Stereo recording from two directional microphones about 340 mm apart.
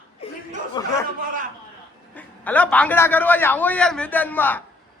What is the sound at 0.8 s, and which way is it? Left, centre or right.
Speech, centre.